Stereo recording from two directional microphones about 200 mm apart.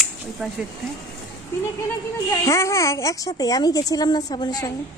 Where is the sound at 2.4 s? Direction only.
15° left (ahead or behind).